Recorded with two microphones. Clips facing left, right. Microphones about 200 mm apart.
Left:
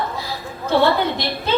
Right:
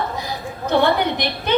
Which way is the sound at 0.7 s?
15° right (ahead or behind).